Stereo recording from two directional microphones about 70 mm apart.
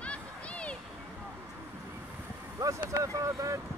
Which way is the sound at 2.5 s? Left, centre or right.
Right.